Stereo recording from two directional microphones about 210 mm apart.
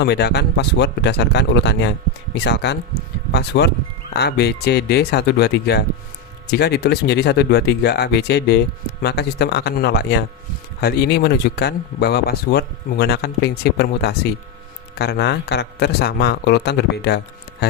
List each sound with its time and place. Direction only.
0.0 s speech: 50° left (ahead or behind)